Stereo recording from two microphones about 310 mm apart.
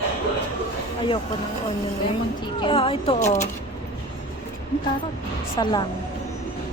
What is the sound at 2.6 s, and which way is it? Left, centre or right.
Speech, centre.